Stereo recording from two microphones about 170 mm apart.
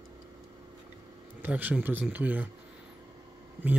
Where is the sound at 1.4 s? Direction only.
10° right (ahead or behind).